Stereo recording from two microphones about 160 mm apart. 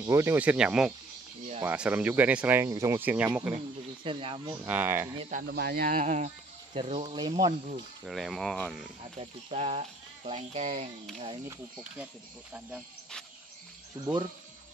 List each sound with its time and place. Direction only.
0.0 s speech: 15° right (ahead or behind)
4.0 s speech: 35° right (ahead or behind)
4.6 s speech: 10° right (ahead or behind)
5.5 s speech: 80° right; by 7.2 s 40° right (ahead or behind)
7.2 s speech: 25° right (ahead or behind)
8.0 s speech: centre (ahead or behind)
9.2 s speech: 40° right (ahead or behind)